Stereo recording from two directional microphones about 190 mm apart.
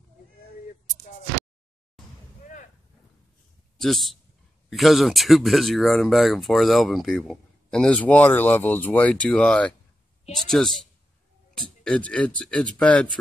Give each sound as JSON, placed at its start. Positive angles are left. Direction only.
{"t": 3.7, "sound": "a man's voice", "side_deg": 0}